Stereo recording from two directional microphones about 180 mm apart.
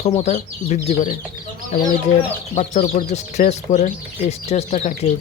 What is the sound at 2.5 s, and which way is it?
Speech, 40° left (ahead or behind).